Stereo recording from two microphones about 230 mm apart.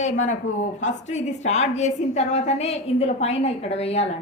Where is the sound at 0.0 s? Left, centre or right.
Left.